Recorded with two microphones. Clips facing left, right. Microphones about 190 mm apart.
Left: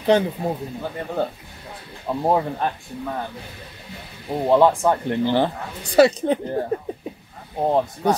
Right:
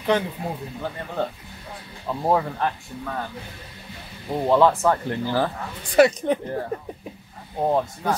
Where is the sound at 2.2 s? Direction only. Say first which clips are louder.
Left 1 dB; 20° left (ahead or behind).